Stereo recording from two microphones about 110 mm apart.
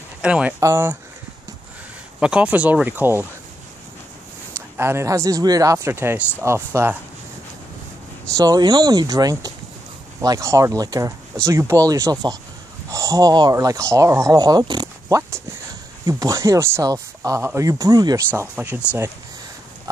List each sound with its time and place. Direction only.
0.2 s speech: 10° right (ahead or behind)
0.6 s speech: 25° right (ahead or behind)
2.1 s speech: 10° right (ahead or behind)
4.6 s speech: 25° right (ahead or behind)
8.4 s speech: 35° right (ahead or behind)
18.4 s speech: 20° right (ahead or behind)